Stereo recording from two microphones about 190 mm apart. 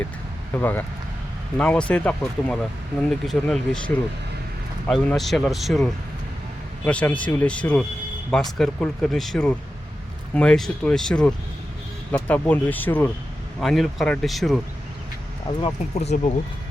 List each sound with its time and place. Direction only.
0.5 s speech: 10° left (ahead or behind)
15.6 s speech: 35° left (ahead or behind)